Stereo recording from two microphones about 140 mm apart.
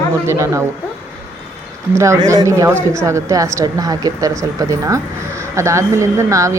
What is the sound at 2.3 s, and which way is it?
A woman's voice, 20° right (ahead or behind).